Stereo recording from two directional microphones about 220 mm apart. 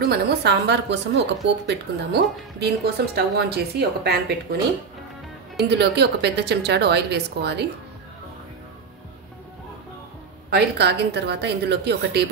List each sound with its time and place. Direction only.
0.0 s a woman's voice: 45° right (ahead or behind)
5.7 s a woman's voice: 50° right (ahead or behind)
10.5 s a woman's voice: 50° right (ahead or behind)